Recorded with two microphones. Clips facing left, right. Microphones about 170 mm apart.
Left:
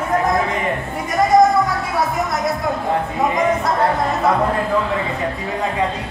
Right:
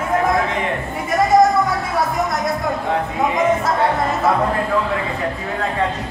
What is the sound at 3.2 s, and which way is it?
Speech, centre (ahead or behind).